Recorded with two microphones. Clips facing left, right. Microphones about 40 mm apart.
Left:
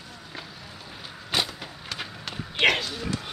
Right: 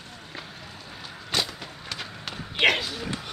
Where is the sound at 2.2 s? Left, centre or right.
Centre.